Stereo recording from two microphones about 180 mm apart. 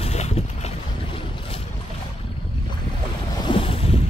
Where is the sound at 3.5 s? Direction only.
30° left (ahead or behind).